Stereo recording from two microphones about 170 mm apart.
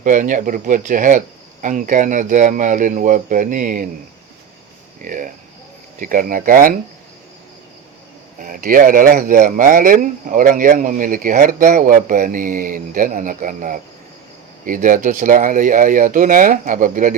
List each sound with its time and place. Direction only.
0.0 s speech: 50° right (ahead or behind)
5.0 s speech: 55° right (ahead or behind)
8.4 s speech: 55° right (ahead or behind)